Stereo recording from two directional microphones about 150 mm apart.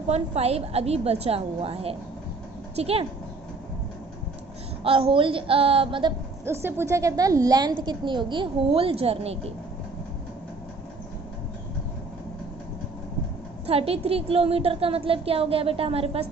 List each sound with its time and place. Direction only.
0.1 s a woman's voice: 45° right (ahead or behind)
4.8 s a woman's voice: 40° right (ahead or behind)
6.4 s a woman's voice: 15° right (ahead or behind); by 9.5 s 45° right (ahead or behind)
13.7 s a woman's voice: 40° right (ahead or behind)